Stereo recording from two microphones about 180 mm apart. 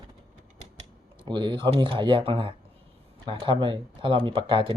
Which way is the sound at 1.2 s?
25° right (ahead or behind).